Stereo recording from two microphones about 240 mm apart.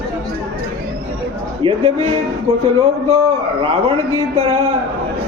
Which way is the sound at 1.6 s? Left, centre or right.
Right.